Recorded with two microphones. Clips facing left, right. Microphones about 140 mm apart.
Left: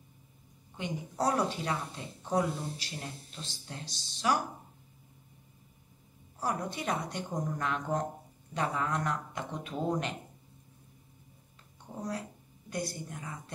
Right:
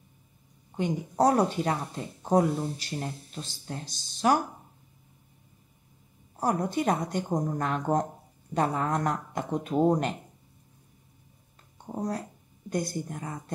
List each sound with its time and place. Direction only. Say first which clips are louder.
0.7 s speech: right 8 dB; 45° right (ahead or behind)
6.4 s speech: right 7 dB; 45° right (ahead or behind)
11.8 s speech: right 5 dB; 45° right (ahead or behind)